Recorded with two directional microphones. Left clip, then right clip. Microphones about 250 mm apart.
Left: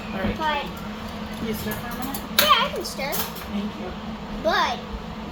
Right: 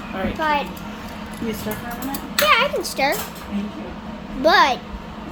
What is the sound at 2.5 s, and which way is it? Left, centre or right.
Speech, right.